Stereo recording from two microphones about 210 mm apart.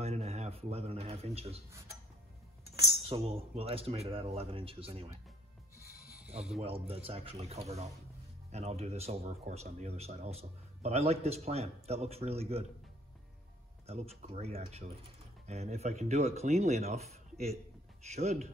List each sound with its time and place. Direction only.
0.0 s a sound: 30° right (ahead or behind)
3.0 s speech: 30° right (ahead or behind)
6.6 s speech: 25° right (ahead or behind)
13.8 s speech: 30° right (ahead or behind)